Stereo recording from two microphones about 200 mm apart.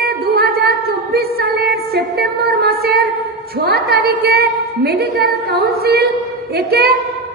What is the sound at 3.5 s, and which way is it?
A woman's voice, 50° right (ahead or behind).